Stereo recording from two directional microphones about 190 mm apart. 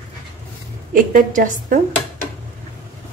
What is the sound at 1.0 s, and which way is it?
Speech, 45° right (ahead or behind).